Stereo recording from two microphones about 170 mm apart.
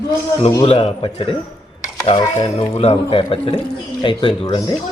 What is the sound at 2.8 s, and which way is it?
Speech, 35° left (ahead or behind).